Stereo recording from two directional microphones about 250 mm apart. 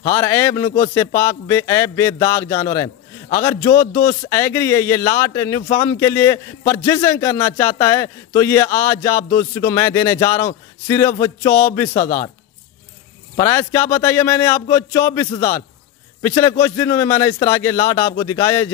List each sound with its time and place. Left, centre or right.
0.1 s speech: centre
3.9 s speech: left
4.3 s speech: centre
12.0 s speech: left
13.4 s speech: centre